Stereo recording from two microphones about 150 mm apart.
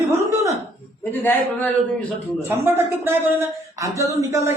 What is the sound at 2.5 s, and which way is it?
Speech, 15° right (ahead or behind).